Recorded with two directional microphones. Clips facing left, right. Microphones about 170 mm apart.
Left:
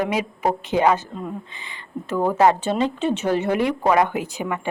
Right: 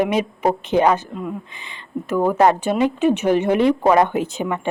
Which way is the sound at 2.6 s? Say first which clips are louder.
Right 4 dB; 15° right (ahead or behind).